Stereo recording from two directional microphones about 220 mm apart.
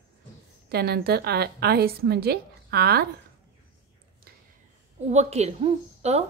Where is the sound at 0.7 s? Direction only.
45° right (ahead or behind).